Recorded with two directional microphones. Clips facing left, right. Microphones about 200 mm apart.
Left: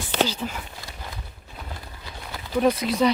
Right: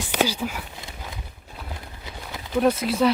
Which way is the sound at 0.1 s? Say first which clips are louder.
Right 1 dB; 10° right (ahead or behind).